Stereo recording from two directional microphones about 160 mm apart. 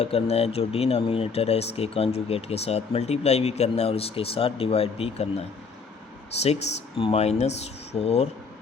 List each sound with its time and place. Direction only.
0.0 s speech: 40° left (ahead or behind)
6.9 s speech: 35° left (ahead or behind)